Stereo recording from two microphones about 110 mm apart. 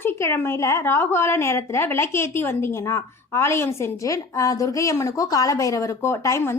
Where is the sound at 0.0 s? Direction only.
20° left (ahead or behind).